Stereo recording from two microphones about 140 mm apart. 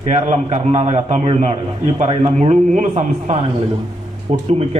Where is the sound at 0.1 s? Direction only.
55° right (ahead or behind).